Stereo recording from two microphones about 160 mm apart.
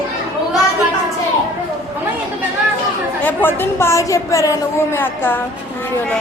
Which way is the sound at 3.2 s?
15° left (ahead or behind).